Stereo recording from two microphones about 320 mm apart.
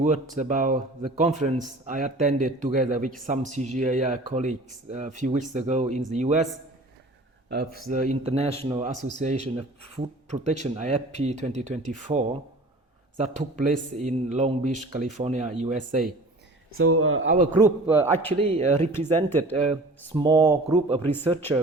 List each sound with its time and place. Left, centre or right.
0.0 s speech: right
7.5 s speech: right
13.4 s speech: right
16.7 s speech: right
17.8 s speech: centre
18.4 s speech: centre
18.9 s speech: centre
20.1 s speech: centre
21.0 s speech: centre